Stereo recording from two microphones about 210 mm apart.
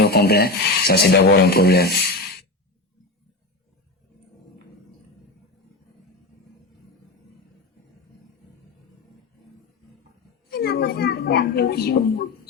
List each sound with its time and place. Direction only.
0.0 s speech: 50° left (ahead or behind)
10.5 s speech: 50° left (ahead or behind)